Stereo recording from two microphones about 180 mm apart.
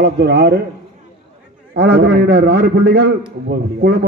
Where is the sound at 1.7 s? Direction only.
70° right (ahead or behind).